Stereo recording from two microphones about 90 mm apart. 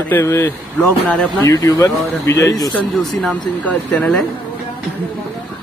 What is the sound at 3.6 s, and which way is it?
Speech, 15° left (ahead or behind).